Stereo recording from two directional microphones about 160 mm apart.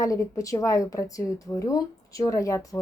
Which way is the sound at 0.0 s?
20° left (ahead or behind).